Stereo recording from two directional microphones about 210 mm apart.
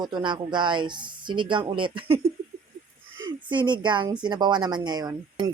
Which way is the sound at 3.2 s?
20° right (ahead or behind).